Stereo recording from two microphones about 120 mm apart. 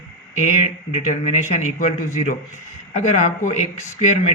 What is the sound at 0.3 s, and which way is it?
Speech, 80° left.